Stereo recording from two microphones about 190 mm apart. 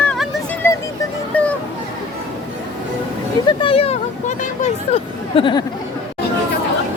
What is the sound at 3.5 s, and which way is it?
Speech, 30° left (ahead or behind).